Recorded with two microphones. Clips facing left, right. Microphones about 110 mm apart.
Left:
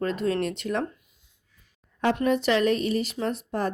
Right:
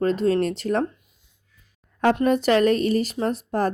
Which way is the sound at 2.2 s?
45° right (ahead or behind).